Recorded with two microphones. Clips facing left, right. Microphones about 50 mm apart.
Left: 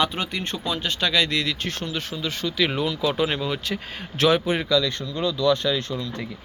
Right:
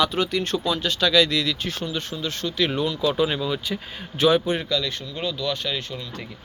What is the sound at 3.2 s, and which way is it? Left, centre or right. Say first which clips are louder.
Speech: right 1 dB; left.